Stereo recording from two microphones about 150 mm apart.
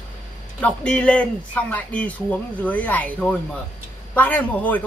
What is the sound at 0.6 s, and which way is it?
Speech, 10° left (ahead or behind).